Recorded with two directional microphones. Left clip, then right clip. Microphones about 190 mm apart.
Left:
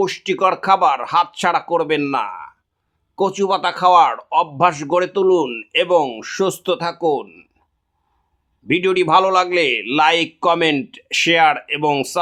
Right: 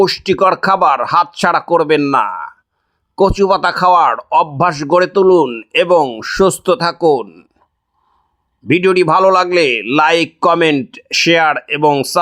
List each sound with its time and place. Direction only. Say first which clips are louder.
0.0 s speech: right 6 dB; 30° right (ahead or behind)
8.6 s speech: right 5 dB; 30° right (ahead or behind)